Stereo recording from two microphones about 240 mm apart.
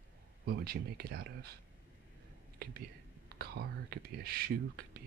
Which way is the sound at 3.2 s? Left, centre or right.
Right.